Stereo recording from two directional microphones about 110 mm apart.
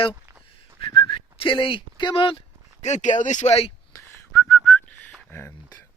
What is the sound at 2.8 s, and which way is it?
Speech, 90° left.